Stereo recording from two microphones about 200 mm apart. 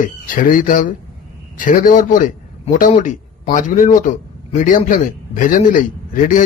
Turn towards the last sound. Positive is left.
turn(degrees=40)  # may be behind; listen again after turning